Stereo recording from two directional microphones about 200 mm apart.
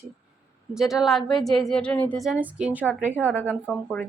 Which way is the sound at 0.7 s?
Centre (ahead or behind).